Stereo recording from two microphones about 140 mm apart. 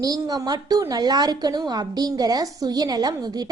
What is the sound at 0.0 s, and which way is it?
A woman's voice, 25° right (ahead or behind).